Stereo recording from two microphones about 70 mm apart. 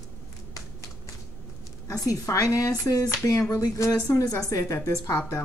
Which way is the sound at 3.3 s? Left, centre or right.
Left.